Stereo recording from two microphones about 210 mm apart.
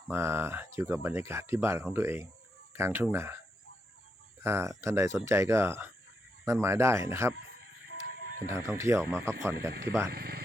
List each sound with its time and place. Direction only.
0.1 s speech: 10° right (ahead or behind)
4.4 s speech: 15° right (ahead or behind)
8.4 s speech: 15° right (ahead or behind)
10.1 s speech: 45° right (ahead or behind)